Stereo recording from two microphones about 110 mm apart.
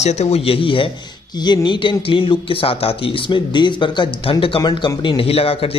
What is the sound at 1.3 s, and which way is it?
A man's voice, 40° left (ahead or behind).